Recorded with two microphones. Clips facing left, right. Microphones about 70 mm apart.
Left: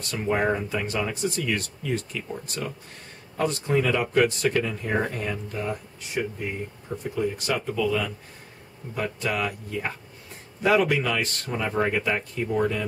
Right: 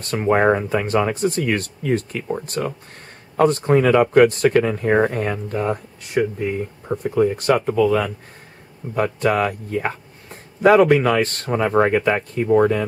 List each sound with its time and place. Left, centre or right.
0.0 s speech: right